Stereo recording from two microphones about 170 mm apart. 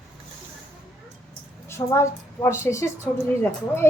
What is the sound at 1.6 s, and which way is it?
A woman's voice, 15° left (ahead or behind).